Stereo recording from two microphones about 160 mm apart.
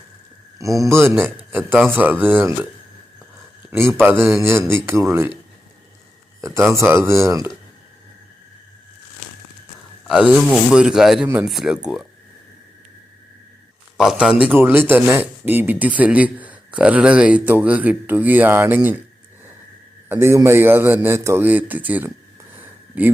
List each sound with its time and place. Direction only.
0.8 s a man's voice: 15° right (ahead or behind)
3.7 s a man's voice: 15° right (ahead or behind)
6.4 s a man's voice: 15° right (ahead or behind)
10.1 s speech: 5° right (ahead or behind)
13.9 s a man's voice: 5° right (ahead or behind)
20.1 s a man's voice: 15° right (ahead or behind)
22.5 s a sound: 10° right (ahead or behind)